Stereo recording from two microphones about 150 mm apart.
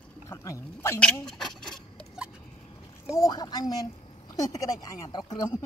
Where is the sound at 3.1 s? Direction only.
25° left (ahead or behind).